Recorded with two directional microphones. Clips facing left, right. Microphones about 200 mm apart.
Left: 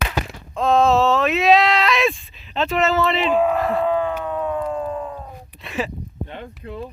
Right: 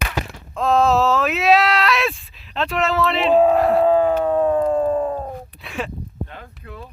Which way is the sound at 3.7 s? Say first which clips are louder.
Right 5 dB; 35° right (ahead or behind).